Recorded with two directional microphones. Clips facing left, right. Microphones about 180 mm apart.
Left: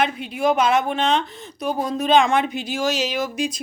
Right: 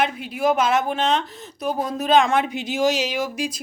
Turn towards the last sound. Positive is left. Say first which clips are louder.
# left 1 dB
turn(degrees=-10)  # may be behind; listen again after turning